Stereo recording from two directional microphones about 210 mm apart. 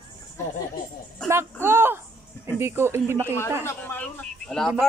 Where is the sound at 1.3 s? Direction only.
10° right (ahead or behind).